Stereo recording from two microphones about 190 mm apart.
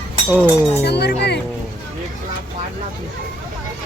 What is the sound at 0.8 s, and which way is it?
Speech, 60° left (ahead or behind).